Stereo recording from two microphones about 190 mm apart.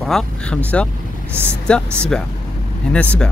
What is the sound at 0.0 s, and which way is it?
Speech, 5° left (ahead or behind).